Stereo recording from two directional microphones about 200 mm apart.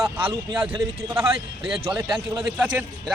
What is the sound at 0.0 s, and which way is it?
Speech, 10° right (ahead or behind).